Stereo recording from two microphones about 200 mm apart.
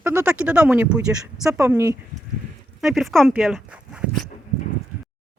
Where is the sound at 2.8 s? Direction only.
Centre (ahead or behind).